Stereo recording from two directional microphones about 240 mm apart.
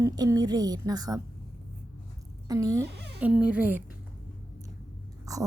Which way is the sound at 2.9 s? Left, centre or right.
Right.